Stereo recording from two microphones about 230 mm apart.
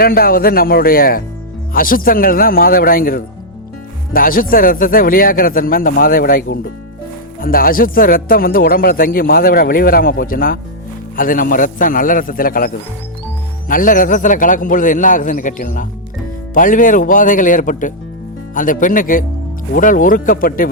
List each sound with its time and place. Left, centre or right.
0.0 s a man's voice: left